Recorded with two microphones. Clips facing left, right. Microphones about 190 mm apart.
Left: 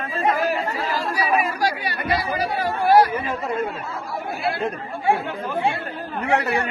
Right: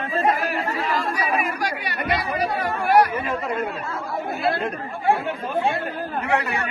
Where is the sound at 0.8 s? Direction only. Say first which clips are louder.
Even; 30° left (ahead or behind).